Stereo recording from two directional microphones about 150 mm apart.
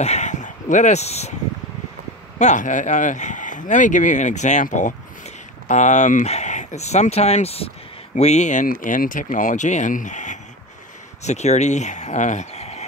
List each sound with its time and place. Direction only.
0.0 s speech: 50° left (ahead or behind)
2.3 s speech: 55° left (ahead or behind)